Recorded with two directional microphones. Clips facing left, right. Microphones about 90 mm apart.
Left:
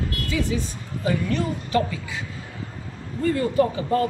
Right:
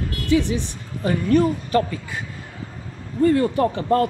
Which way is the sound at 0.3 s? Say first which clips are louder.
Right 7 dB; 70° right (ahead or behind).